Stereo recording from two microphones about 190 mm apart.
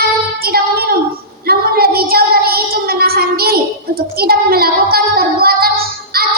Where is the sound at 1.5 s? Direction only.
55° right (ahead or behind).